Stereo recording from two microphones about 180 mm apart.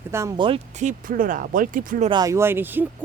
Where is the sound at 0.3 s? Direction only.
30° right (ahead or behind).